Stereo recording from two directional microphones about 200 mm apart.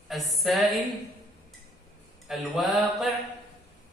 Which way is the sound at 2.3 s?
Centre (ahead or behind).